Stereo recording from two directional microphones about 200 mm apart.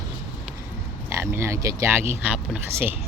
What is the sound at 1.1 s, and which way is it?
Speech, 15° right (ahead or behind).